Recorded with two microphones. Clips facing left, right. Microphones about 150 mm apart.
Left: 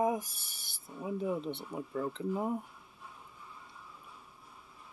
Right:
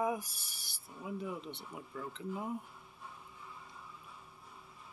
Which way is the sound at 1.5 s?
40° left (ahead or behind).